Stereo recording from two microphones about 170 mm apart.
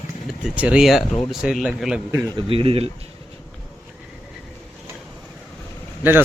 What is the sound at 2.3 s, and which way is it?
Speech, 30° right (ahead or behind).